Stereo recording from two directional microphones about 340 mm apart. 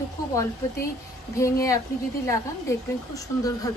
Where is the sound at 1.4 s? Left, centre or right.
Centre.